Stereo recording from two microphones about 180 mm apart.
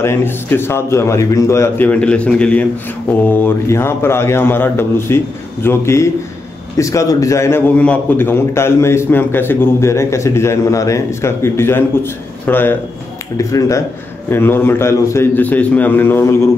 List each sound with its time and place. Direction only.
0.0 s a man's voice: 15° left (ahead or behind)